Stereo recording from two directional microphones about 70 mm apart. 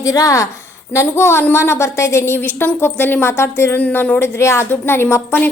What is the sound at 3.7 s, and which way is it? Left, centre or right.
A woman's voice, left.